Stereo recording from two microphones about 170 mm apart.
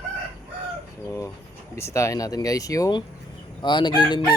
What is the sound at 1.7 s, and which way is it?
Speech, 15° left (ahead or behind).